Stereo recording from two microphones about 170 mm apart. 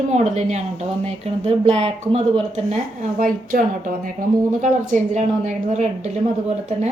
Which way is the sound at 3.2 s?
55° right (ahead or behind).